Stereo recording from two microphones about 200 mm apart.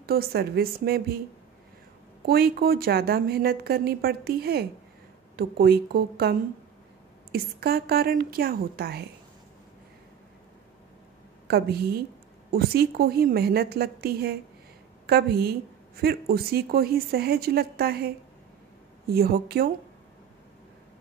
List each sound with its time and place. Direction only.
0.0 s a woman's voice: 50° right (ahead or behind)
2.2 s a woman's voice: 50° right (ahead or behind)
7.3 s a woman's voice: 50° right (ahead or behind)
11.4 s a woman's voice: 55° right (ahead or behind)